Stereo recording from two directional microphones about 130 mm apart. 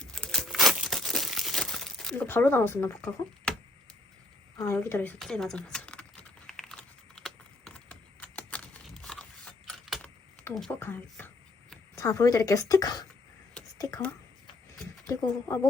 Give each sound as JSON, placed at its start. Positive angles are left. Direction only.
{"t": 0.0, "sound": "crumpling", "side_deg": 5}
{"t": 2.1, "sound": "speech", "side_deg": 15}
{"t": 4.6, "sound": "speech", "side_deg": 20}
{"t": 5.2, "sound": "speech", "side_deg": 5}
{"t": 6.5, "sound": "typing", "side_deg": 5}
{"t": 7.2, "sound": "computer keyboard", "side_deg": 0}
{"t": 10.5, "sound": "speech", "side_deg": 0}
{"t": 10.8, "sound": "speech", "side_deg": 15}
{"t": 11.9, "sound": "a woman's voice", "side_deg": 25}
{"t": 15.0, "sound": "a woman's voice", "side_deg": 25}